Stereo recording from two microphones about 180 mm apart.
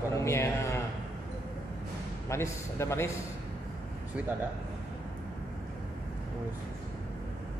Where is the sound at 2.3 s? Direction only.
15° left (ahead or behind).